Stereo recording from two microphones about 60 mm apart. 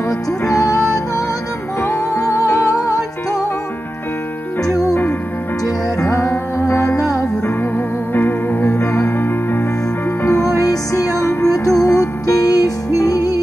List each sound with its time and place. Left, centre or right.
0.1 s music: left
1.8 s music: left
4.6 s music: left
5.9 s music: left
7.0 s music: left
7.7 s music: left
10.4 s music: left